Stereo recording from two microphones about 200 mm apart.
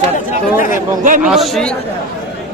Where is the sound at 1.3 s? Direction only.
Centre (ahead or behind).